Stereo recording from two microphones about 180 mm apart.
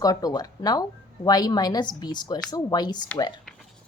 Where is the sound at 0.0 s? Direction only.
20° left (ahead or behind).